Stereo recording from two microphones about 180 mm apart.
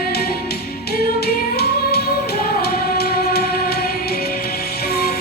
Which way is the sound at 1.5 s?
60° left (ahead or behind).